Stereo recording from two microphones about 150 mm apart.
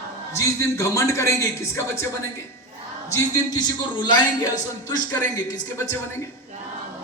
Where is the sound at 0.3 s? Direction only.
20° left (ahead or behind).